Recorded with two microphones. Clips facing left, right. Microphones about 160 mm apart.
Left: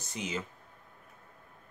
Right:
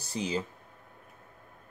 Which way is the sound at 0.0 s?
35° right (ahead or behind).